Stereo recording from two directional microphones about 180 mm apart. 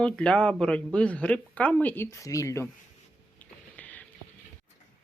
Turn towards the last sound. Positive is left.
turn(degrees=10)  # may be behind; listen again after turning